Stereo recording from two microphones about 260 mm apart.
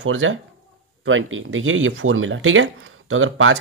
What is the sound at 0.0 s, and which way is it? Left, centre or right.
Speech, right.